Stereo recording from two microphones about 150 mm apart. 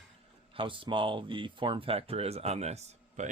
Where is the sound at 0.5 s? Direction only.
35° right (ahead or behind).